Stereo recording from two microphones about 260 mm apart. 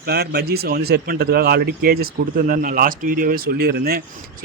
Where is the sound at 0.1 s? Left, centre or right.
Right.